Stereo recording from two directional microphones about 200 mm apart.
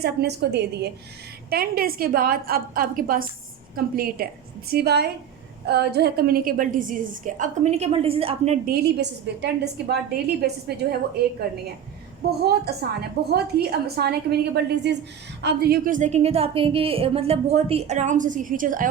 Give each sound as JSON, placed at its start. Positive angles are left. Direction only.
{"t": 0.0, "sound": "a woman's voice", "side_deg": -55}
{"t": 8.6, "sound": "a woman's voice", "side_deg": -50}
{"t": 12.4, "sound": "a woman's voice", "side_deg": -55}